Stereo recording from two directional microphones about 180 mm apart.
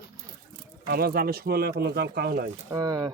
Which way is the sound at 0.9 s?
60° right (ahead or behind).